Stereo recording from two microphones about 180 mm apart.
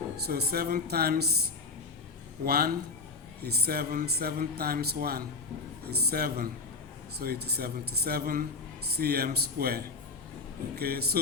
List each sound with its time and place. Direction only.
0.3 s speech: 60° right (ahead or behind)
2.4 s speech: 55° right (ahead or behind)